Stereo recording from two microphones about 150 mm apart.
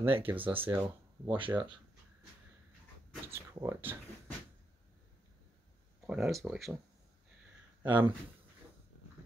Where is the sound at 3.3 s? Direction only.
15° right (ahead or behind).